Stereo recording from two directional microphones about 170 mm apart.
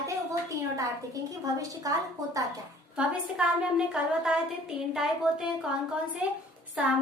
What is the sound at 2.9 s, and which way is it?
Speech, 5° right (ahead or behind).